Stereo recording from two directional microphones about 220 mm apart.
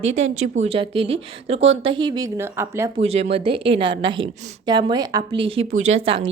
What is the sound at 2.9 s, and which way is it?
A woman's voice, 30° right (ahead or behind).